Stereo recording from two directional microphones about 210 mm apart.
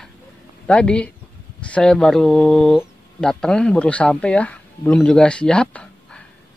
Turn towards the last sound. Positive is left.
turn(degrees=5)  # may be behind; listen again after turning